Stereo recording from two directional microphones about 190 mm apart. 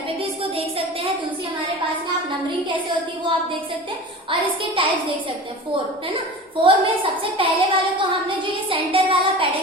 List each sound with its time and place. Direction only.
0.2 s a sound: 30° right (ahead or behind)
4.3 s a woman's voice: 25° right (ahead or behind)
6.6 s a woman's voice: 30° right (ahead or behind)